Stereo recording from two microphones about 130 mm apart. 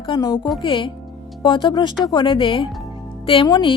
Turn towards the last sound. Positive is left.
turn(degrees=35)  # may be behind; listen again after turning